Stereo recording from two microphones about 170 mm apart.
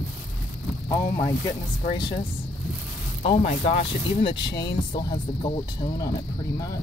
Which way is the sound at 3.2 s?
30° left (ahead or behind).